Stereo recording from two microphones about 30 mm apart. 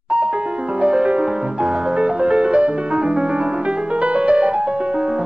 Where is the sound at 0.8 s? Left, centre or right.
Right.